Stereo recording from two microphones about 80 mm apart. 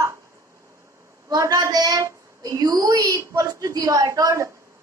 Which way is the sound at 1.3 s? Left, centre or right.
Right.